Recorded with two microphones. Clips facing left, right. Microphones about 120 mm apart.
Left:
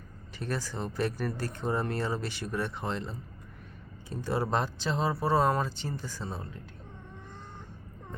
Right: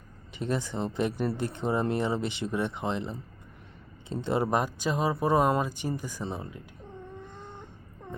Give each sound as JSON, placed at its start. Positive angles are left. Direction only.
{"t": 0.3, "sound": "speech", "side_deg": -20}